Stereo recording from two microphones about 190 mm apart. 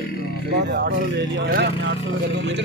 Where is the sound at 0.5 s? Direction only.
60° right (ahead or behind).